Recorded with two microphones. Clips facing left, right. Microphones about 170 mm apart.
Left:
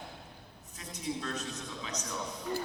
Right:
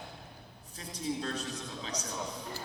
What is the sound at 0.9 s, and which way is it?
Music, 30° right (ahead or behind).